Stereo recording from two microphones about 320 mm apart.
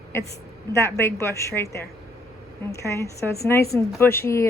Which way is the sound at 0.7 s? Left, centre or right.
Centre.